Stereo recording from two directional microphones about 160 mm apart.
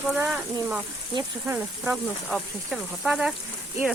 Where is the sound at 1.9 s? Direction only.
Centre (ahead or behind).